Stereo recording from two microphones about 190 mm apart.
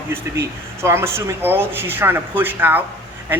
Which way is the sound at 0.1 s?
15° right (ahead or behind).